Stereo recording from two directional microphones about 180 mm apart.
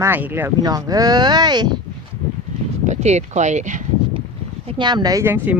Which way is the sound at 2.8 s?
40° right (ahead or behind).